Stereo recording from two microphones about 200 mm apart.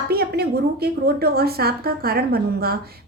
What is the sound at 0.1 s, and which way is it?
Speech, 50° right (ahead or behind).